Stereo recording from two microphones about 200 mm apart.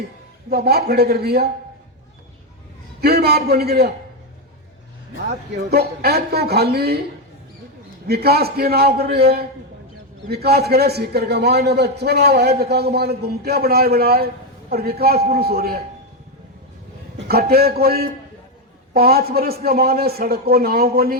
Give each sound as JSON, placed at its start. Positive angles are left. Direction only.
{"t": 0.5, "sound": "a man's voice", "side_deg": -50}
{"t": 3.0, "sound": "a man's voice", "side_deg": -55}
{"t": 5.7, "sound": "a man's voice", "side_deg": -50}
{"t": 8.0, "sound": "a man's voice", "side_deg": -50}
{"t": 17.2, "sound": "a man's voice", "side_deg": -50}